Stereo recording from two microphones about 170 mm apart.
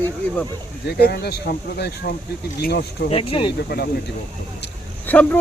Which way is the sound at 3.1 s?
35° left (ahead or behind).